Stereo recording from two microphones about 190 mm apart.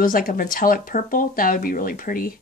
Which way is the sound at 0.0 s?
50° left (ahead or behind).